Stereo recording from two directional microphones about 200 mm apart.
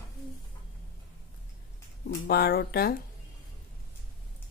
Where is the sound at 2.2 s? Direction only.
50° left (ahead or behind).